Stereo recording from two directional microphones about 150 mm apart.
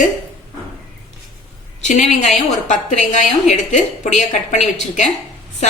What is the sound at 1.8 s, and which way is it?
A woman's voice, 50° left (ahead or behind).